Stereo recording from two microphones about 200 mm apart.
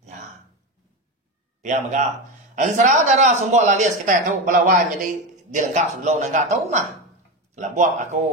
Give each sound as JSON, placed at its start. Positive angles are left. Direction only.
{"t": 1.6, "sound": "a man's voice", "side_deg": -35}